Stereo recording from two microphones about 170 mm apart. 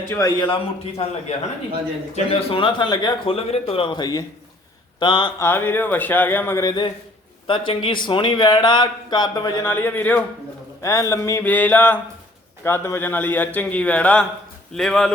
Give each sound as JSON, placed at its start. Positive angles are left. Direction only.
{"t": 0.1, "sound": "a man's voice", "side_deg": 20}
{"t": 2.1, "sound": "a man's voice", "side_deg": 30}
{"t": 5.4, "sound": "a man's voice", "side_deg": 15}
{"t": 7.4, "sound": "a man's voice", "side_deg": 30}
{"t": 9.6, "sound": "a man's voice", "side_deg": 10}